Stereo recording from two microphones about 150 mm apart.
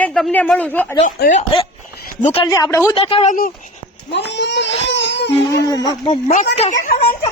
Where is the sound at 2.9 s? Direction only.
40° left (ahead or behind).